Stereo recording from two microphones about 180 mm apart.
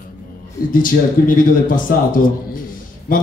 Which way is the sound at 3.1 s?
50° left (ahead or behind).